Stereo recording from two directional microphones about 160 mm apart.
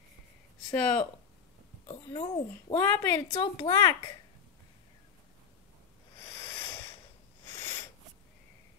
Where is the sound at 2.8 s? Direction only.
10° left (ahead or behind).